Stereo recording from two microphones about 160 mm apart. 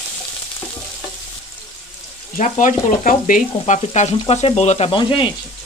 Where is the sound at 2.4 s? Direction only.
55° left (ahead or behind).